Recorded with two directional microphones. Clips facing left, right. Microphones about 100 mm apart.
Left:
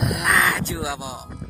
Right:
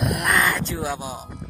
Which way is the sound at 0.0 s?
Centre (ahead or behind).